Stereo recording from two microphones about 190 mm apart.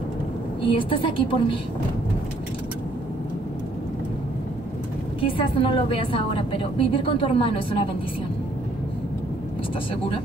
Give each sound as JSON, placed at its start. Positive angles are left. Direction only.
{"t": 0.6, "sound": "a woman's voice", "side_deg": 25}
{"t": 5.2, "sound": "a woman's voice", "side_deg": 30}